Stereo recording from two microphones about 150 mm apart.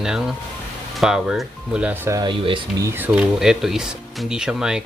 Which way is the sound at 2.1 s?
30° right (ahead or behind).